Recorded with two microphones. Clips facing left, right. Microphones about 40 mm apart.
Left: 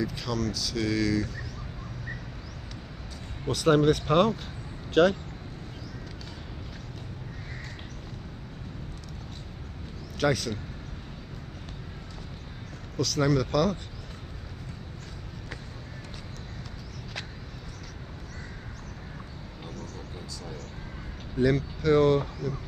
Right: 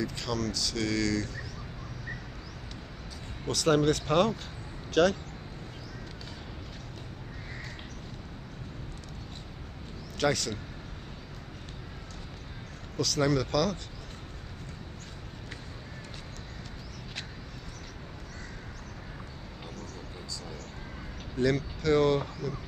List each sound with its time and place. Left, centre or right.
0.0 s speech: centre
3.5 s speech: centre
5.0 s speech: left
10.1 s speech: centre
12.9 s speech: centre
13.5 s speech: centre
21.5 s speech: centre